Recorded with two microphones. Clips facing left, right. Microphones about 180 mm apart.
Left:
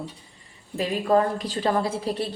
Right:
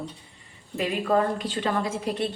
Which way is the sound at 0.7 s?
35° left (ahead or behind).